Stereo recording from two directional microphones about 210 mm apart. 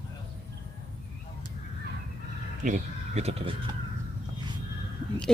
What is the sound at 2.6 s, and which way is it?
Speech, 35° right (ahead or behind).